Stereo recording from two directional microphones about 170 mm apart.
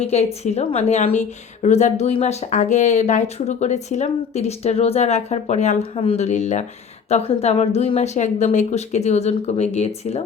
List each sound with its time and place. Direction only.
0.0 s a woman's voice: 40° left (ahead or behind)